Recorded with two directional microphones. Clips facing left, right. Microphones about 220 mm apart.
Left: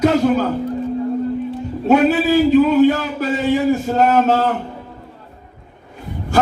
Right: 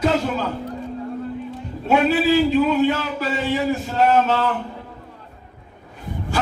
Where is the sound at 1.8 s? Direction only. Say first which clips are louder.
Left 4 dB; 45° left (ahead or behind).